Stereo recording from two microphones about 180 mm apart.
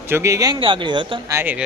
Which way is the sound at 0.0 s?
15° right (ahead or behind).